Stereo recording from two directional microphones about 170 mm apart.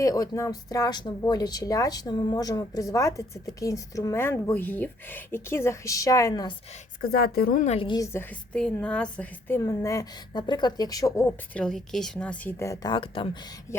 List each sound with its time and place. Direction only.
0.0 s speech: 20° left (ahead or behind)
7.0 s a woman's voice: 60° left (ahead or behind)
7.8 s speech: 25° left (ahead or behind)
11.5 s speech: 5° left (ahead or behind); by 13.7 s 25° left (ahead or behind)